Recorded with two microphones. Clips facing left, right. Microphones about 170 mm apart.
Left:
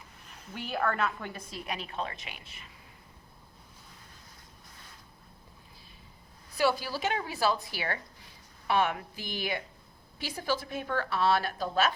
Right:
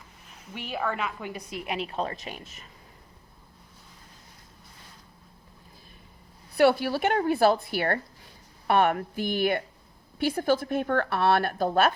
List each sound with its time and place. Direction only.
0.5 s a woman's voice: 5° right (ahead or behind); by 2.6 s 40° right (ahead or behind)
6.6 s speech: 60° right (ahead or behind)